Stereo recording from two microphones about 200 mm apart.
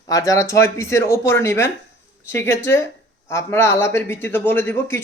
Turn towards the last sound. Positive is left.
turn(degrees=10)  # may be behind; listen again after turning